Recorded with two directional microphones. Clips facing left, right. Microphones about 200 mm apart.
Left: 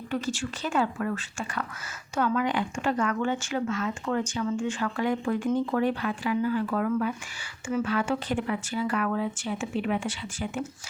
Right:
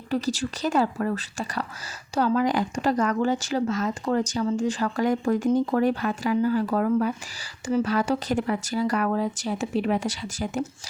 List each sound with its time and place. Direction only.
0.1 s speech: 35° right (ahead or behind)